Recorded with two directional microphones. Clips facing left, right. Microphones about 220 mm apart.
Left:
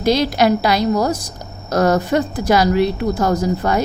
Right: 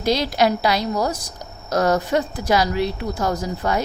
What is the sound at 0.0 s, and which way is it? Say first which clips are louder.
A woman's voice: left 4 dB; 55° left (ahead or behind).